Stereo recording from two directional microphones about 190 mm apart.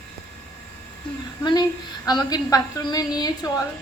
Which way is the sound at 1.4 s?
20° left (ahead or behind).